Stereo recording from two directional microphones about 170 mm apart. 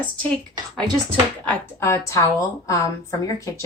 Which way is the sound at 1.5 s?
15° left (ahead or behind).